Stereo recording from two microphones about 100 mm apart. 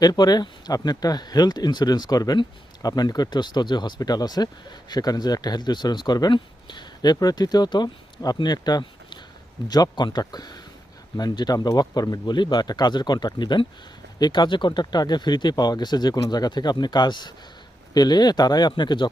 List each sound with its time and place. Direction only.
0.0 s speech: 40° left (ahead or behind)